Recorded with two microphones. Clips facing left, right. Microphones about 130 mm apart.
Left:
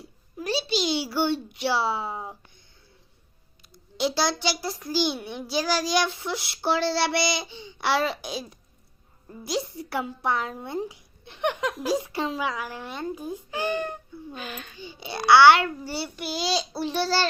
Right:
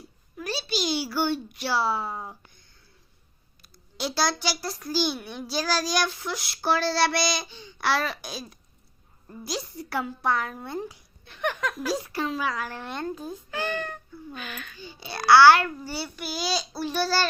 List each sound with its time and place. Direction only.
0.3 s a child's voice: 25° left (ahead or behind)
3.6 s a child's voice: 20° left (ahead or behind)
14.3 s a child's voice: 30° left (ahead or behind)